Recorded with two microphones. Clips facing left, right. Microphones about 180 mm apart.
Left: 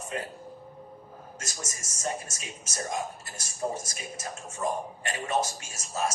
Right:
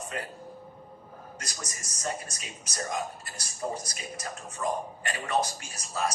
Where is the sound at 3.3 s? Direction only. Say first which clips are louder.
Left 2 dB; 25° left (ahead or behind).